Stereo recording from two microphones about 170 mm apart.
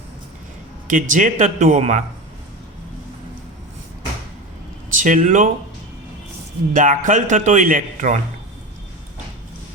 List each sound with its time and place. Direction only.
0.9 s speech: 50° right (ahead or behind)
4.9 s speech: 50° right (ahead or behind)
6.7 s speech: 50° right (ahead or behind)